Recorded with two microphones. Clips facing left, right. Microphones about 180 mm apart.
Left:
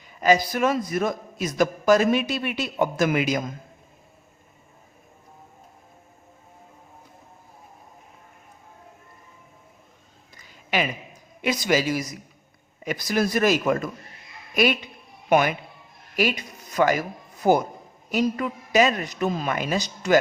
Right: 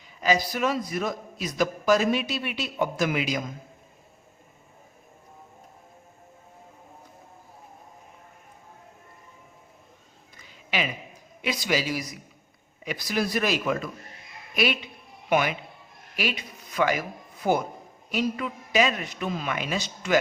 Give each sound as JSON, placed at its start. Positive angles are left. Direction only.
{"t": 0.2, "sound": "a man's voice", "side_deg": 50}
{"t": 10.3, "sound": "a sound", "side_deg": 45}
{"t": 11.4, "sound": "a man's voice", "side_deg": 45}